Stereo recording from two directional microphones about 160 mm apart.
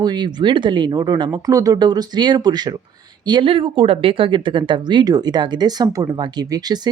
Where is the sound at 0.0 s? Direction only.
25° right (ahead or behind).